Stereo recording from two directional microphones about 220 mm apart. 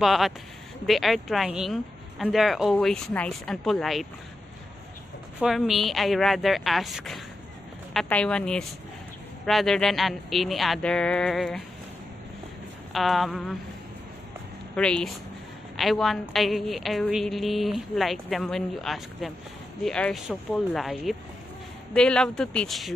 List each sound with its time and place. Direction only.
0.0 s a woman's voice: centre (ahead or behind)
5.4 s a woman's voice: centre (ahead or behind)
12.9 s a woman's voice: centre (ahead or behind)
14.8 s a woman's voice: 5° left (ahead or behind)